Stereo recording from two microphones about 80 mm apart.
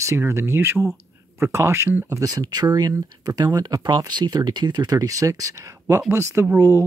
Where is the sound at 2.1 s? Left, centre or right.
Right.